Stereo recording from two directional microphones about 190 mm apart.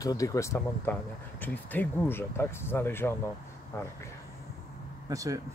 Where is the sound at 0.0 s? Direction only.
20° left (ahead or behind).